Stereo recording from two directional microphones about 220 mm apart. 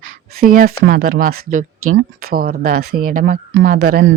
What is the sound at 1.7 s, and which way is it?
Speech, 70° right (ahead or behind).